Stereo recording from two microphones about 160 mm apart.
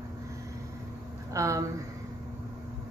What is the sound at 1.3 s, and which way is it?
Speech, 20° right (ahead or behind).